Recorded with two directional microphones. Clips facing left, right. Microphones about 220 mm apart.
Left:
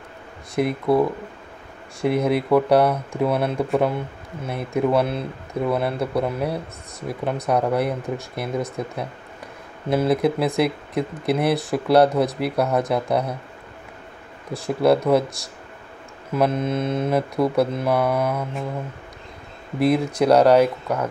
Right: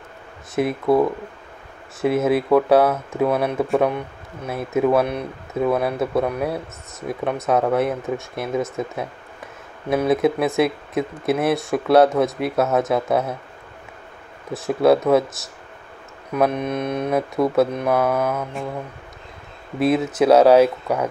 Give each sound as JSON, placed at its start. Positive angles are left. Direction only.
{"t": 0.6, "sound": "speech", "side_deg": 0}
{"t": 5.0, "sound": "mantra", "side_deg": -15}
{"t": 5.5, "sound": "speech", "side_deg": 0}
{"t": 10.0, "sound": "speech", "side_deg": 0}
{"t": 14.5, "sound": "speech", "side_deg": 0}
{"t": 16.5, "sound": "mantra", "side_deg": -15}
{"t": 17.1, "sound": "speech", "side_deg": 0}
{"t": 19.8, "sound": "speech", "side_deg": 0}